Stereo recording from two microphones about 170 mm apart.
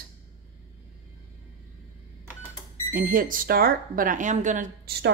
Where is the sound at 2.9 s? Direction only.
55° right (ahead or behind).